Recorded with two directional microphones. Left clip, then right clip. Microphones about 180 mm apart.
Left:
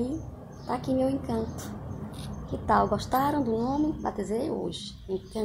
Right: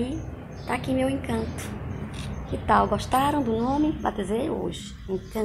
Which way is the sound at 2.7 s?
10° left (ahead or behind).